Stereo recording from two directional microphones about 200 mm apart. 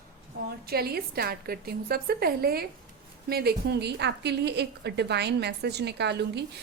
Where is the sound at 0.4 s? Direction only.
50° right (ahead or behind).